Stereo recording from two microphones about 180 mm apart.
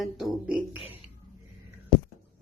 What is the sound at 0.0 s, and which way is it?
Music, centre (ahead or behind).